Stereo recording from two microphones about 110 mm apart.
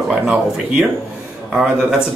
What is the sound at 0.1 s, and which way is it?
Speech, 10° right (ahead or behind).